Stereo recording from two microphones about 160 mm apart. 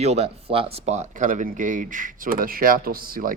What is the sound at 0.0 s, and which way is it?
Speech, 40° right (ahead or behind).